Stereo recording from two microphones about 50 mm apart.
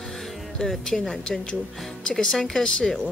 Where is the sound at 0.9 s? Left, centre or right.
Centre.